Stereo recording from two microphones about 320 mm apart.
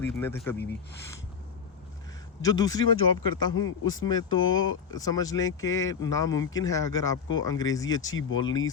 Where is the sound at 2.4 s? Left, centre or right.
Centre.